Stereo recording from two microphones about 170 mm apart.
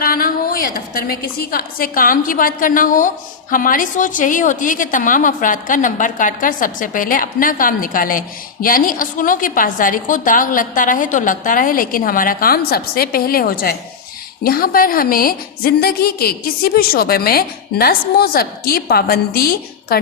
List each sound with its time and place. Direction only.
0.0 s a woman's voice: 55° left (ahead or behind)